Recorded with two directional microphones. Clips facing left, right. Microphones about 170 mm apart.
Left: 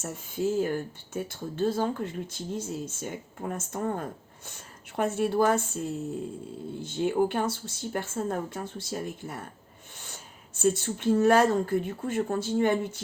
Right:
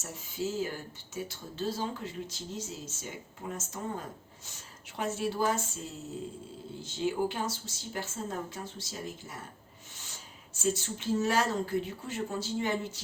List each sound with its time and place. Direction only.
0.0 s speech: 55° left (ahead or behind)